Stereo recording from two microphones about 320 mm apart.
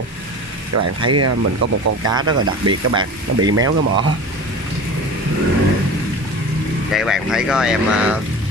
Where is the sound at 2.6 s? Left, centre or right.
Centre.